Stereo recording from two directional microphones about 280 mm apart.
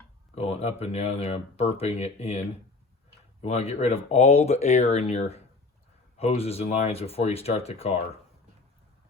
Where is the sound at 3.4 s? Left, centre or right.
Left.